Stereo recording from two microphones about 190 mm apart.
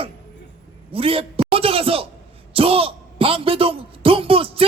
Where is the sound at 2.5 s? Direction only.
30° right (ahead or behind).